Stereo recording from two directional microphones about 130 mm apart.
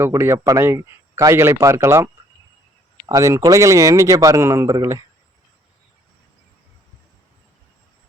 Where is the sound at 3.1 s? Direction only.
25° right (ahead or behind).